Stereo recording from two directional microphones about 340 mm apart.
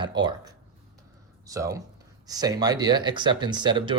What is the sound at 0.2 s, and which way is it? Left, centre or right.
Speech, centre.